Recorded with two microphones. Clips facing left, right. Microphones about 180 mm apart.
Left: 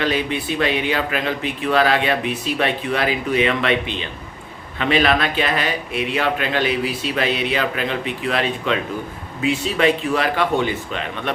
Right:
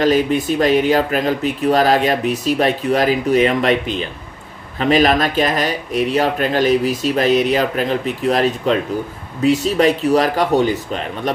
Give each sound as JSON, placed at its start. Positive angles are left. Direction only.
{"t": 0.0, "sound": "speech", "side_deg": -40}